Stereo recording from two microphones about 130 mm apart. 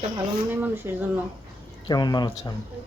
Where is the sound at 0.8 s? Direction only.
20° right (ahead or behind).